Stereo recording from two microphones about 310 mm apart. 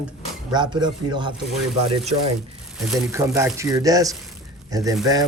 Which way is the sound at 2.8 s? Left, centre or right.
Centre.